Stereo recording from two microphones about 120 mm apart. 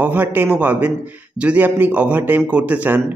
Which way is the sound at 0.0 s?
15° right (ahead or behind).